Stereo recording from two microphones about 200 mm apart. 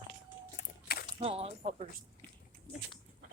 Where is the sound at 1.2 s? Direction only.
30° right (ahead or behind).